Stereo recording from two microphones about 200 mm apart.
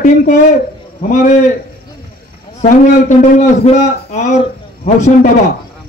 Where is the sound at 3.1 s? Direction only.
35° left (ahead or behind).